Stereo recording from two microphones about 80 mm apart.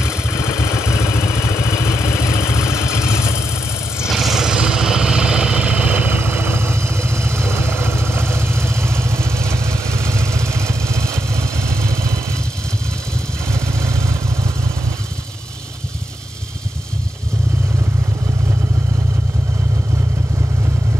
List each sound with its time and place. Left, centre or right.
0.0 s vehicle: left
4.2 s vehicle: centre; by 12.4 s right
13.5 s vehicle: right